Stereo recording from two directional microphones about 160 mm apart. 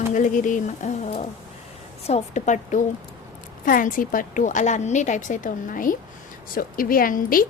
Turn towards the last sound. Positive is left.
turn(degrees=60)  # may be behind; listen again after turning